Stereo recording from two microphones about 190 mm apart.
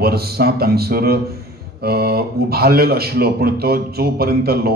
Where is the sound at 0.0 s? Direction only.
55° right (ahead or behind).